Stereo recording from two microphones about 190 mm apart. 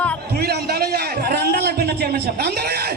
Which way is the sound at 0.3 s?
55° right (ahead or behind).